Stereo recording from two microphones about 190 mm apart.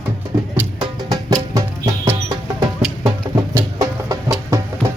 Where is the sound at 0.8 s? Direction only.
20° right (ahead or behind).